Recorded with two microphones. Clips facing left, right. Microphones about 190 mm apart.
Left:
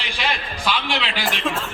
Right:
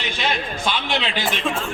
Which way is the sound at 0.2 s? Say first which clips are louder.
Right 1 dB; 25° right (ahead or behind).